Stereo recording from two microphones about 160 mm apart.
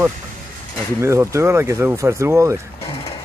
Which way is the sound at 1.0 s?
15° right (ahead or behind).